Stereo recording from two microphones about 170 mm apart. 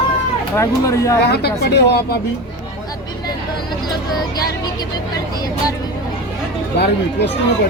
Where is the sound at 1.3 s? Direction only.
70° left (ahead or behind).